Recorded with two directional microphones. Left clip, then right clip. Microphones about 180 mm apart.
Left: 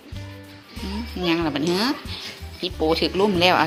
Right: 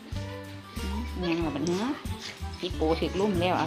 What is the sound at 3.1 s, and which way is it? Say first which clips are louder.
Speech: left 9 dB; 20° left (ahead or behind).